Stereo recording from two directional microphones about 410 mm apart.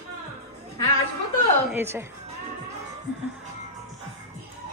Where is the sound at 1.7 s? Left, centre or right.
Centre.